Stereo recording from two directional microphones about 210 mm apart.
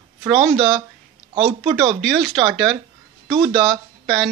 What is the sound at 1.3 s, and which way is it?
Speech, 25° right (ahead or behind).